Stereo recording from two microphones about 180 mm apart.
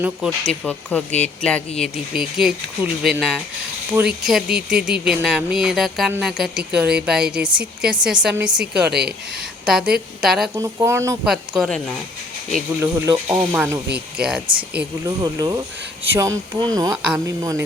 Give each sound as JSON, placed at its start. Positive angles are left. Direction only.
{"t": 0.0, "sound": "speech", "side_deg": 0}
{"t": 8.9, "sound": "speech", "side_deg": -65}
{"t": 9.6, "sound": "speech", "side_deg": -5}
{"t": 10.5, "sound": "speech", "side_deg": -15}
{"t": 11.3, "sound": "speech", "side_deg": 0}
{"t": 12.8, "sound": "speech", "side_deg": -15}
{"t": 15.0, "sound": "speech", "side_deg": -20}
{"t": 16.7, "sound": "speech", "side_deg": -20}